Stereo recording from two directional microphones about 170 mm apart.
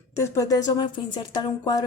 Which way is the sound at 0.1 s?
20° left (ahead or behind).